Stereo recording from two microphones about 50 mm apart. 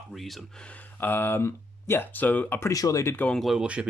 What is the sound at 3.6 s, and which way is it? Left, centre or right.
Speech, right.